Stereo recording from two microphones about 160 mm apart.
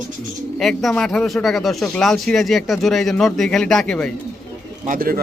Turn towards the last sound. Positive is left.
turn(degrees=-65)  # may be behind; listen again after turning